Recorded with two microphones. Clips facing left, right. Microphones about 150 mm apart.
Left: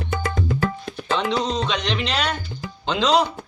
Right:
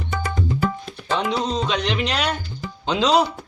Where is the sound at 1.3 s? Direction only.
5° right (ahead or behind).